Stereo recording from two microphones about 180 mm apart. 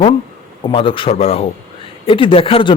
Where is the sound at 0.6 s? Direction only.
30° left (ahead or behind).